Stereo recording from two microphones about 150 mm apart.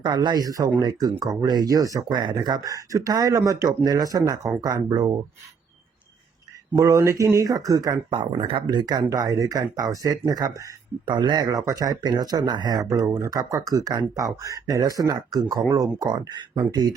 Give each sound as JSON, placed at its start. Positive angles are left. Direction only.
{"t": 0.0, "sound": "speech", "side_deg": -30}
{"t": 6.7, "sound": "speech", "side_deg": -20}